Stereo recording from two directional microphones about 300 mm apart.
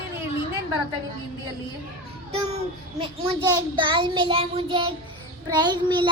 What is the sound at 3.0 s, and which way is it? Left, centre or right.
A child's voice, centre.